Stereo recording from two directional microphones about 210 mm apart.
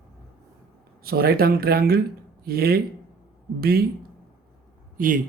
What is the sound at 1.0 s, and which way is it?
Speech, 45° right (ahead or behind).